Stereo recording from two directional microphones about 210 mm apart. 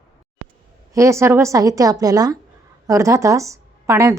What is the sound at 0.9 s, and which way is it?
A woman's voice, 15° right (ahead or behind).